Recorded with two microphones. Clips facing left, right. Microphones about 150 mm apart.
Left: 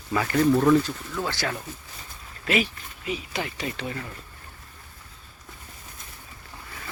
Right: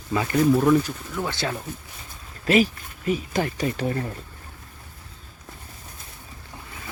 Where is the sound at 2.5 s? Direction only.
40° right (ahead or behind).